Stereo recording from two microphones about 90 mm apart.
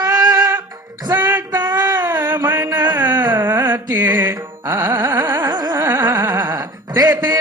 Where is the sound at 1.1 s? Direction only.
25° right (ahead or behind).